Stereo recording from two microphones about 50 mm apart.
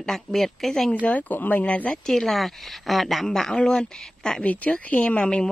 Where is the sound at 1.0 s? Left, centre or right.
Left.